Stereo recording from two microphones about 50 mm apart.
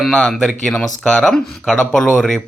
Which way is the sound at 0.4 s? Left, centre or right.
Centre.